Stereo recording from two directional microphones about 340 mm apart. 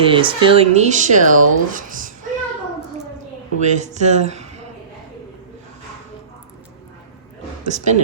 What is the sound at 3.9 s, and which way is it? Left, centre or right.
Speech, centre.